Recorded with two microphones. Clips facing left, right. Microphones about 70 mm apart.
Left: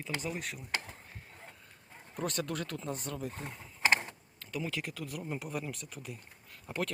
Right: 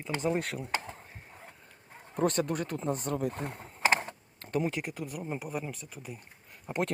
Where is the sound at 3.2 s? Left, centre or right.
Right.